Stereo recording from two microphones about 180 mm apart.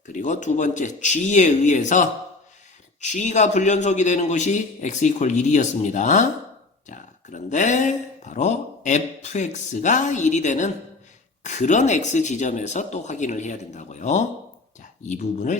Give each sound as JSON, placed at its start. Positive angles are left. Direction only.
{"t": 0.1, "sound": "a man's voice", "side_deg": 45}